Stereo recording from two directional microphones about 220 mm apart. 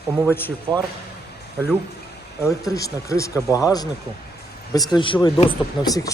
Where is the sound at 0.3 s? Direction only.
10° left (ahead or behind).